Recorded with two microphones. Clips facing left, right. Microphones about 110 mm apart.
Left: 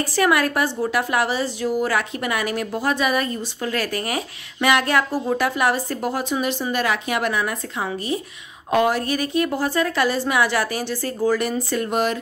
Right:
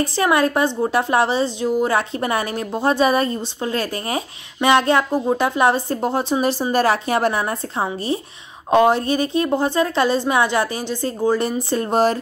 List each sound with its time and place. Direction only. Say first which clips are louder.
0.0 s a woman's voice: right 2 dB; 25° right (ahead or behind)